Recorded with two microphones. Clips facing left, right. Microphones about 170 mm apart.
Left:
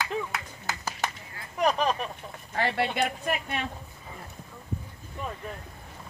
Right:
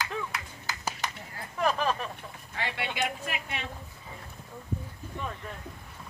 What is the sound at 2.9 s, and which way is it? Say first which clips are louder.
Speech: left 4 dB; 50° left (ahead or behind).